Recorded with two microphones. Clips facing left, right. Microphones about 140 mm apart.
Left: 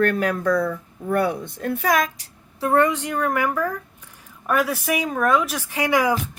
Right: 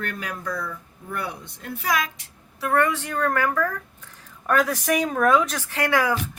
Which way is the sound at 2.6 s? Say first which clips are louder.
Left 3 dB; 20° left (ahead or behind).